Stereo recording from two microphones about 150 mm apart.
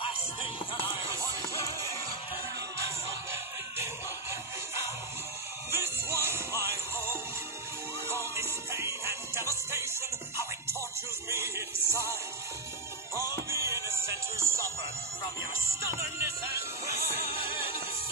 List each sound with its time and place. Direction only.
3.3 s music: 15° right (ahead or behind)
5.7 s music: 15° right (ahead or behind)
11.2 s music: 15° right (ahead or behind)
15.9 s music: 15° right (ahead or behind)